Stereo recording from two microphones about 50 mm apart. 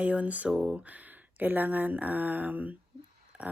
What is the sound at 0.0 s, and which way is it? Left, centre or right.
Speech, right.